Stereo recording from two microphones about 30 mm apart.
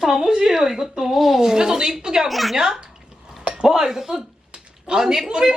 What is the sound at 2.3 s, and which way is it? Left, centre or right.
Speech, centre.